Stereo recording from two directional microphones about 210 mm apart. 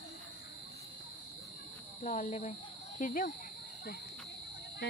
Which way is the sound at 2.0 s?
35° left (ahead or behind).